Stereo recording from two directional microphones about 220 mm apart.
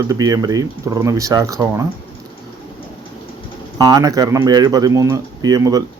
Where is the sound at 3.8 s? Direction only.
15° right (ahead or behind).